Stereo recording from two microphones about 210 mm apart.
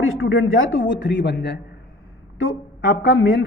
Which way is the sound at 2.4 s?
65° left (ahead or behind).